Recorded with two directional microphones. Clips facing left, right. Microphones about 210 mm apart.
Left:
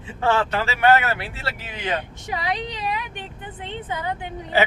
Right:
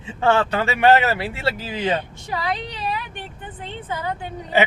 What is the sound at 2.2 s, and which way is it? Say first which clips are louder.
A woman's voice: even; 15° left (ahead or behind).